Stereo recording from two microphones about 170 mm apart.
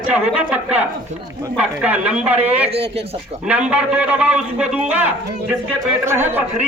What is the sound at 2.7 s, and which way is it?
Speech, 35° right (ahead or behind).